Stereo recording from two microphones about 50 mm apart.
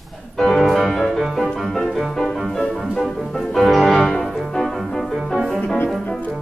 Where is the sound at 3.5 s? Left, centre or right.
Centre.